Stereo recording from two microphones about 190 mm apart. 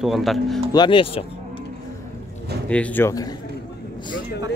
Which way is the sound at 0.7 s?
25° left (ahead or behind).